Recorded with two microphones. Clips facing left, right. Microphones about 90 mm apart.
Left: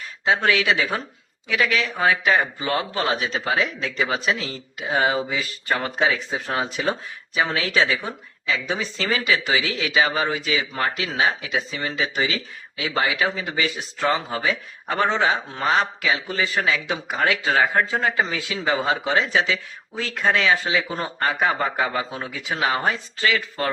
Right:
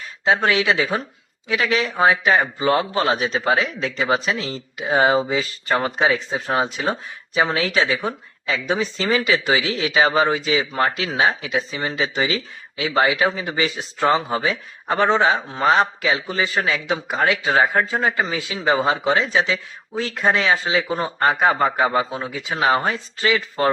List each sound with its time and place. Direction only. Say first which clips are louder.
0.3 s a man's voice: right 2 dB; 25° right (ahead or behind)
21.2 s a man's voice: right 5 dB; 30° right (ahead or behind)